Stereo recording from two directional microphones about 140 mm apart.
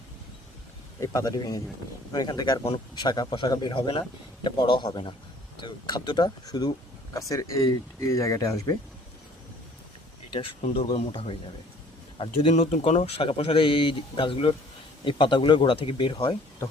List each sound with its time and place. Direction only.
0.9 s speech: 25° left (ahead or behind)
11.1 s a man's voice: 45° left (ahead or behind)
12.5 s speech: 55° left (ahead or behind); by 16.3 s 35° left (ahead or behind)